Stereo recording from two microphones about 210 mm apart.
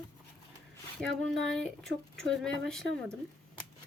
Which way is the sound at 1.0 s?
Centre (ahead or behind).